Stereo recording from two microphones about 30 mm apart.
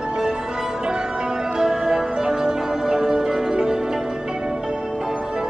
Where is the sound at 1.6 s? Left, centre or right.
Centre.